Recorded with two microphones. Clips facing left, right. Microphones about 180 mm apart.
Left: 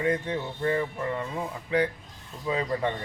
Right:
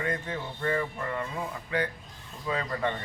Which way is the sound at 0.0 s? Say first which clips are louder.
Left 5 dB; 20° left (ahead or behind).